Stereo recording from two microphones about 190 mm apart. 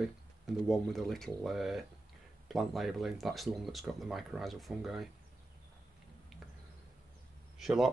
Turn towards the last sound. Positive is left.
turn(degrees=0)  # may be behind; listen again after turning